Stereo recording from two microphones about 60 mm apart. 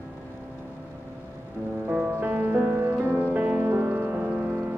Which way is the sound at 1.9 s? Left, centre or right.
Right.